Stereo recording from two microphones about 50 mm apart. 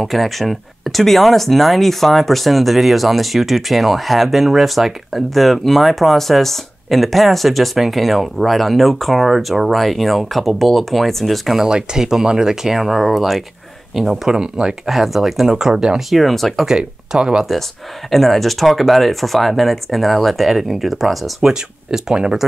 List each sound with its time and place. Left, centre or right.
0.0 s speech: centre
16.1 s speech: centre
16.6 s speech: centre
18.1 s speech: centre
21.4 s speech: centre